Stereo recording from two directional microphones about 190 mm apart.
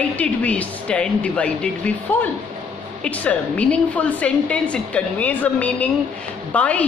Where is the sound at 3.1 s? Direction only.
5° left (ahead or behind).